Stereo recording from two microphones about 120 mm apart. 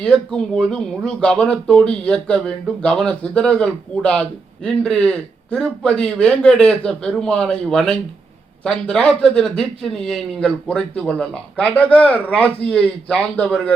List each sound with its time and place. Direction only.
0.0 s speech: 5° left (ahead or behind)